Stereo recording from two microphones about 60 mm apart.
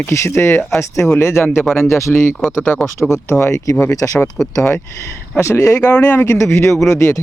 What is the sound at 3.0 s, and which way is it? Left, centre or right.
Speech, left.